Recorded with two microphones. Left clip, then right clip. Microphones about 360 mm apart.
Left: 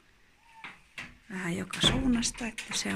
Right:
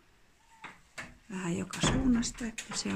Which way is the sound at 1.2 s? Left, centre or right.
Centre.